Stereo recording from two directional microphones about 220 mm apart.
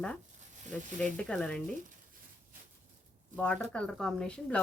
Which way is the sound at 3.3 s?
5° left (ahead or behind).